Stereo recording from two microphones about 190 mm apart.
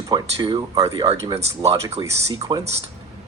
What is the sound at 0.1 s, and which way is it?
Speech, 25° right (ahead or behind).